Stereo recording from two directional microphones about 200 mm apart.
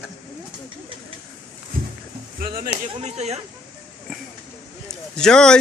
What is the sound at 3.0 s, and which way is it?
Speech, 30° right (ahead or behind).